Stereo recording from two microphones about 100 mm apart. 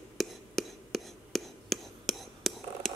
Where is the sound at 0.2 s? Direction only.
Centre (ahead or behind).